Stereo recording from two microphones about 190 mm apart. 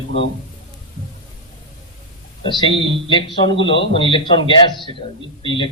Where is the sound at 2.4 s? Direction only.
30° left (ahead or behind).